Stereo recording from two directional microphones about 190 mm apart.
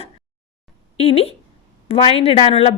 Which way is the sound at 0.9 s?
30° left (ahead or behind).